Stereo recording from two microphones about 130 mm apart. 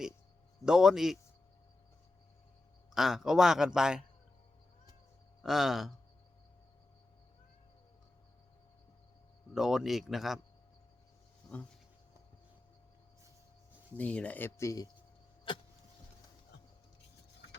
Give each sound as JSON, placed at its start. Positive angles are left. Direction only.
{"t": 0.6, "sound": "a man's voice", "side_deg": -5}
{"t": 2.9, "sound": "a man's voice", "side_deg": -5}
{"t": 5.4, "sound": "speech", "side_deg": 0}
{"t": 9.6, "sound": "a man's voice", "side_deg": -5}
{"t": 11.4, "sound": "a sound", "side_deg": 0}
{"t": 13.9, "sound": "speech", "side_deg": 10}
{"t": 15.5, "sound": "vehicle", "side_deg": 40}